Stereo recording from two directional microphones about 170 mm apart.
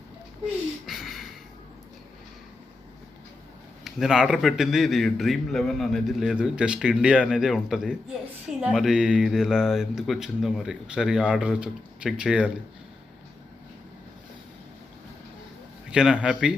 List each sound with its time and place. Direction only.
0.9 s a sound: centre (ahead or behind)
3.8 s a man's voice: 5° right (ahead or behind)
15.9 s a man's voice: 5° right (ahead or behind)